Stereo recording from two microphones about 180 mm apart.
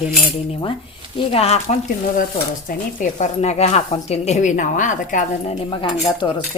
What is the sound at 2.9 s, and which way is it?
Speech, 40° left (ahead or behind).